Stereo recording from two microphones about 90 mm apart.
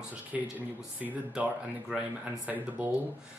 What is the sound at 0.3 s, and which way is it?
Speech, 10° right (ahead or behind).